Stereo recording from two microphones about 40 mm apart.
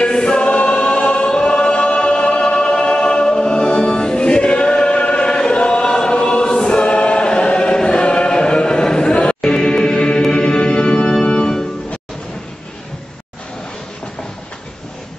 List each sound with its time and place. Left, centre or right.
0.0 s choir: centre
9.1 s music: left
9.6 s music: centre
11.2 s organ: left